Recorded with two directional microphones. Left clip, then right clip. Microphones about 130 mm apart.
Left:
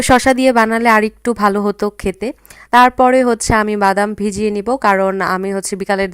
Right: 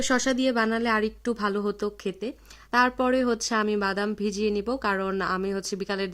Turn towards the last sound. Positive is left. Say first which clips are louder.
# left 12 dB
turn(degrees=60)  # may be behind; listen again after turning